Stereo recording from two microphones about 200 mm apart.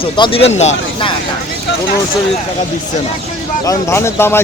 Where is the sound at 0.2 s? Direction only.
25° left (ahead or behind).